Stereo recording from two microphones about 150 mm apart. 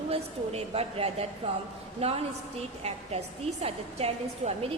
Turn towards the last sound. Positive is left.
turn(degrees=-40)  # may be behind; listen again after turning